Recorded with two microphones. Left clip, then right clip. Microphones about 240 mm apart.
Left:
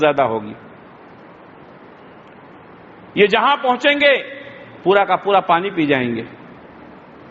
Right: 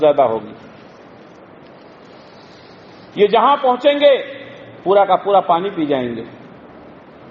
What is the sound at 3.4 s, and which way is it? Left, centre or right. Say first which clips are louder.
Speech: right 2 dB; left.